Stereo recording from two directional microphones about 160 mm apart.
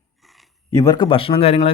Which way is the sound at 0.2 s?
Centre (ahead or behind).